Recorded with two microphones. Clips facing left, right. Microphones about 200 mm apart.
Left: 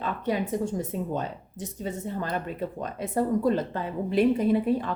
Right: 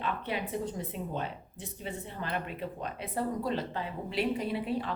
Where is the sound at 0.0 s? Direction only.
45° left (ahead or behind).